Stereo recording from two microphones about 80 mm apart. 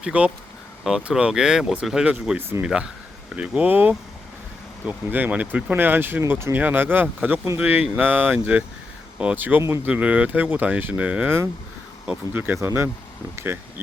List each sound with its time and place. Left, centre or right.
0.0 s speech: centre
12.3 s speech: right
12.5 s speech: right